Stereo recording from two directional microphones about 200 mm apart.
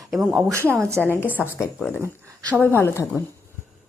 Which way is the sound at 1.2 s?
10° left (ahead or behind).